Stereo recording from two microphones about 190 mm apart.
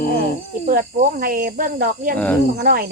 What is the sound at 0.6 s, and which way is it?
Speech, 45° right (ahead or behind).